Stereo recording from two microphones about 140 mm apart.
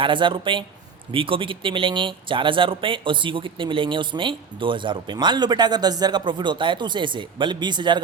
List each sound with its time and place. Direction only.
0.0 s speech: 35° right (ahead or behind)